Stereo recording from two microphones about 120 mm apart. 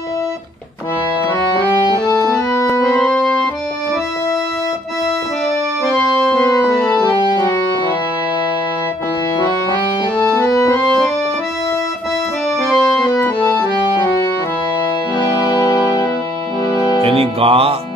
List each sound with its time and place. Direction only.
2.0 s music: 30° left (ahead or behind)
6.2 s organ: 30° left (ahead or behind)
10.2 s music: 30° left (ahead or behind)
12.6 s music: 25° left (ahead or behind)
15.2 s music: 30° left (ahead or behind)
17.0 s music: 55° right (ahead or behind)